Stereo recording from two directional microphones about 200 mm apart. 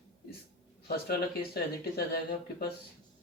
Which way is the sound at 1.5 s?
50° left (ahead or behind).